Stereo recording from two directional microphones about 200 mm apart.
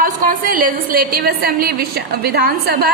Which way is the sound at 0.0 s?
45° right (ahead or behind).